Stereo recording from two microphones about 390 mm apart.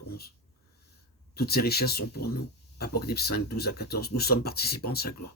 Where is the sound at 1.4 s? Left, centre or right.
Left.